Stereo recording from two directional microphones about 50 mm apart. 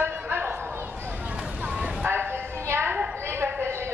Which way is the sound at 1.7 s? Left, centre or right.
Right.